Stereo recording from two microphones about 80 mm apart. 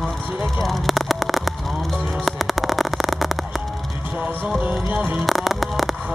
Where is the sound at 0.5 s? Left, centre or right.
Centre.